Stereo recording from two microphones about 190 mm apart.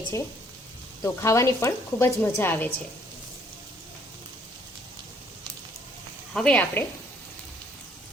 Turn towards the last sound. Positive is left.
turn(degrees=5)  # may be behind; listen again after turning